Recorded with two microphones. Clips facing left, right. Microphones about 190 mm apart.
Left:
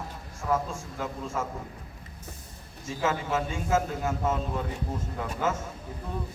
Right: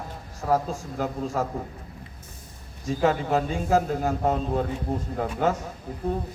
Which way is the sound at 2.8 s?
35° right (ahead or behind).